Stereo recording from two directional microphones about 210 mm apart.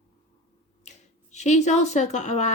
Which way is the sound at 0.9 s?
35° left (ahead or behind).